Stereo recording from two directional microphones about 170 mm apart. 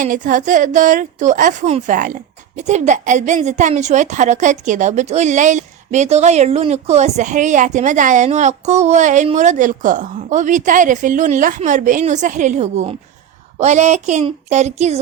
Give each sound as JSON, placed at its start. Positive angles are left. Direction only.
{"t": 0.0, "sound": "a woman's voice", "side_deg": -50}